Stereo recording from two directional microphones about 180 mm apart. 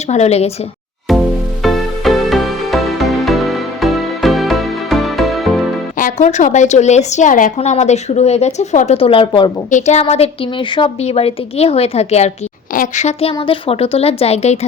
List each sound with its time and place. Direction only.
0.1 s a woman's voice: 35° left (ahead or behind)
1.6 s music: centre (ahead or behind)
6.0 s a woman's voice: 45° left (ahead or behind); by 9.5 s 30° left (ahead or behind)
9.6 s a woman's voice: 40° left (ahead or behind)